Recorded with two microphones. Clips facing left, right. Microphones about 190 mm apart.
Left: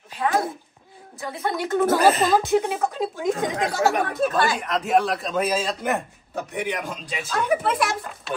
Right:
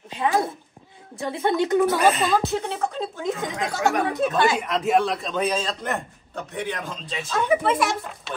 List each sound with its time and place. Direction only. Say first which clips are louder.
0.1 s a sound: even; 20° right (ahead or behind)
1.1 s speech: right 4 dB; 25° right (ahead or behind)
1.9 s speech: left 2 dB; 40° left (ahead or behind)
2.5 s a man's voice: left 4 dB; 10° left (ahead or behind)